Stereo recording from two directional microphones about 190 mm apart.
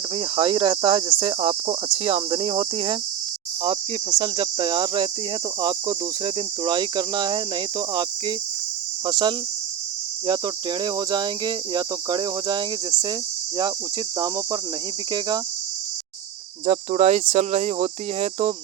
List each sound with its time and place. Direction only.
0.2 s speech: 30° right (ahead or behind)
14.2 s speech: 20° right (ahead or behind)
16.6 s speech: 35° right (ahead or behind)